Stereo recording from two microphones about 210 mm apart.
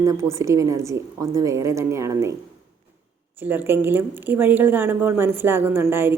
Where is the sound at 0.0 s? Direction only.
15° right (ahead or behind).